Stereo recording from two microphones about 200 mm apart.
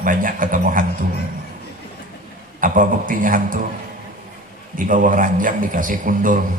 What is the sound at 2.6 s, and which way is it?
Speech, 40° right (ahead or behind).